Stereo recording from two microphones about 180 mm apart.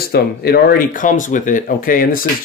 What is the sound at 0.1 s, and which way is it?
Speech, 60° left (ahead or behind).